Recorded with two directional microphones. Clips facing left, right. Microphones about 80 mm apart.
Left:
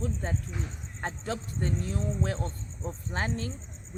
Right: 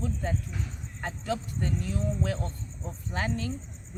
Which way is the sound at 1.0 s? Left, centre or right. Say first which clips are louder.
Right 2 dB; left.